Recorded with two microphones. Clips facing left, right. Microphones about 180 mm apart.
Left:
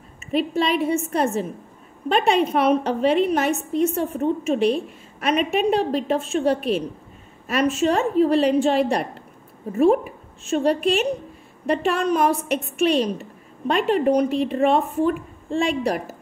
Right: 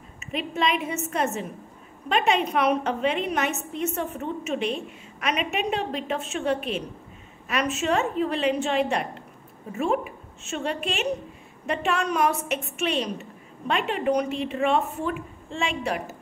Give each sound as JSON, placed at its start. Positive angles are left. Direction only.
{"t": 0.3, "sound": "a woman's voice", "side_deg": 35}